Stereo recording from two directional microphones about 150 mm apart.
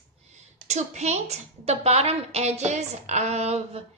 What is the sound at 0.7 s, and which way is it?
A woman's voice, 50° right (ahead or behind).